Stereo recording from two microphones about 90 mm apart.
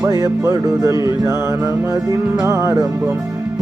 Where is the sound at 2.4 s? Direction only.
40° right (ahead or behind).